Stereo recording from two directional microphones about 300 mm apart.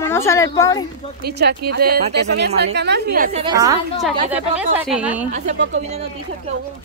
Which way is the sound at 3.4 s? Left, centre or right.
Centre.